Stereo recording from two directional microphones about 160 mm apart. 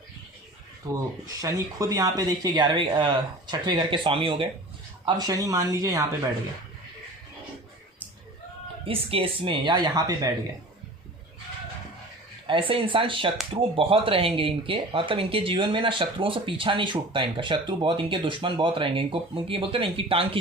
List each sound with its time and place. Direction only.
0.9 s speech: 20° right (ahead or behind)
8.8 s speech: 35° right (ahead or behind)
12.5 s speech: 35° right (ahead or behind)